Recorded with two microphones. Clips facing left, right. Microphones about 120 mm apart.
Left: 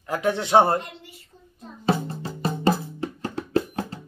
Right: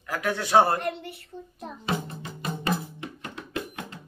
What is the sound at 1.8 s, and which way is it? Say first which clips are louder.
Music: left 7 dB; 30° left (ahead or behind).